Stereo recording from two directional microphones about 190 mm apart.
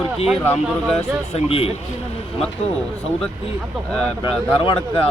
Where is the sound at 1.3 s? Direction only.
30° left (ahead or behind).